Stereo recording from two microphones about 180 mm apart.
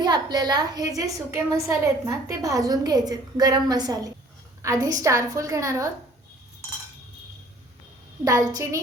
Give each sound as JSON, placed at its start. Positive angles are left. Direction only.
{"t": 0.0, "sound": "a woman's voice", "side_deg": -25}
{"t": 8.2, "sound": "a woman's voice", "side_deg": -20}